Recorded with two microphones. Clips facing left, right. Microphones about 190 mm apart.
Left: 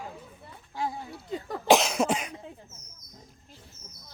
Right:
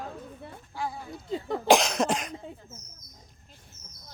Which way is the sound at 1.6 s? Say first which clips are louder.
Even; 5° left (ahead or behind).